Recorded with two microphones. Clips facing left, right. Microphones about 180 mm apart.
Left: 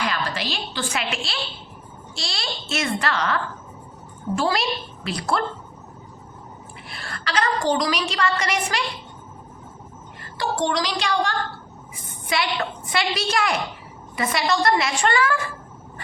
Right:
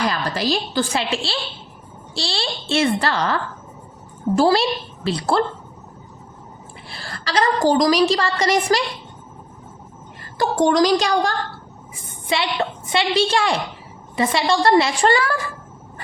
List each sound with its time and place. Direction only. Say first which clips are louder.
0.0 s a woman's voice: right 5 dB; 40° right (ahead or behind)
6.8 s a woman's voice: right 2 dB; 30° right (ahead or behind)
10.3 s a woman's voice: right 7 dB; 45° right (ahead or behind)
12.3 s a woman's voice: right 3 dB; 25° right (ahead or behind)